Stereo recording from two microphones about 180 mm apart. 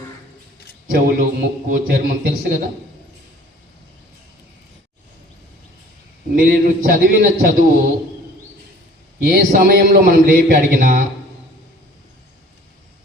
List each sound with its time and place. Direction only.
0.9 s a man's voice: 55° right (ahead or behind)
6.3 s a man's voice: 55° right (ahead or behind)
9.2 s a man's voice: 50° right (ahead or behind)